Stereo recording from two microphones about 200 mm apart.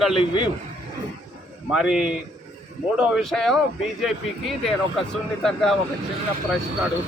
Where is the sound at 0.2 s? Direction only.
20° left (ahead or behind).